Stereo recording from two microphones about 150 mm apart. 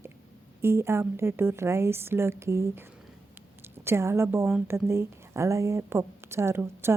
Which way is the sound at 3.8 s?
15° right (ahead or behind).